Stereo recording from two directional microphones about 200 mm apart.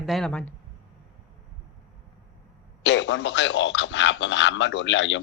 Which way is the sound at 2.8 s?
65° left (ahead or behind).